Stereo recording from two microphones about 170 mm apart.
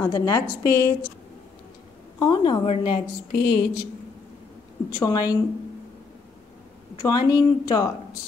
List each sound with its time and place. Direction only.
0.0 s speech: 20° left (ahead or behind)
2.1 s a woman's voice: 25° left (ahead or behind)
3.3 s speech: 85° left
4.9 s speech: 20° left (ahead or behind)
7.0 s speech: 20° left (ahead or behind)